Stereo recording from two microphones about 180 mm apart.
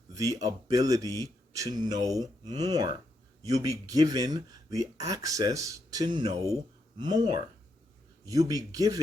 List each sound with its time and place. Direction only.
0.4 s speech: 20° right (ahead or behind)